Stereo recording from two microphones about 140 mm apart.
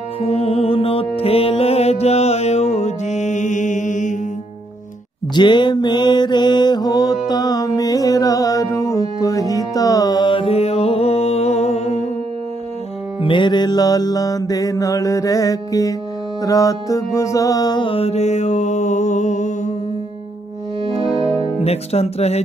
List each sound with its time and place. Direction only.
0.2 s music: 45° left (ahead or behind); by 4.2 s 60° left (ahead or behind)
5.3 s mantra: 35° left (ahead or behind); by 12.0 s 50° left (ahead or behind)
13.2 s music: 35° left (ahead or behind); by 19.7 s 60° left (ahead or behind)
20.9 s music: 40° right (ahead or behind)
21.6 s speech: 50° left (ahead or behind)